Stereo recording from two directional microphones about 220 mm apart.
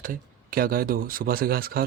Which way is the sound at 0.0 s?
40° right (ahead or behind).